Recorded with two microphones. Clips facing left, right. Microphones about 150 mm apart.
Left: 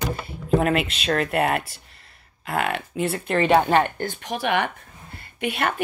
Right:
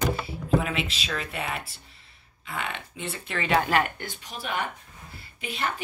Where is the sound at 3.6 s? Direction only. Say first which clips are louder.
Left 5 dB; 25° left (ahead or behind).